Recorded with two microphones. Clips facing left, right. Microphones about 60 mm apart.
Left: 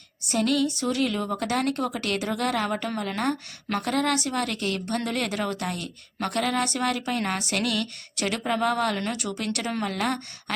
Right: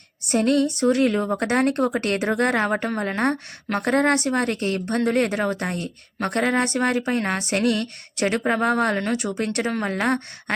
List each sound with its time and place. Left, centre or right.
0.3 s a woman's voice: right